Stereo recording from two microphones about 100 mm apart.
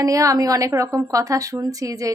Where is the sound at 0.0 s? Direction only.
35° right (ahead or behind).